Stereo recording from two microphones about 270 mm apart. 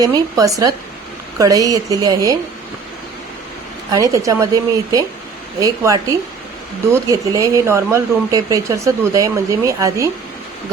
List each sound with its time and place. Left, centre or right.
0.0 s speech: centre
3.9 s speech: centre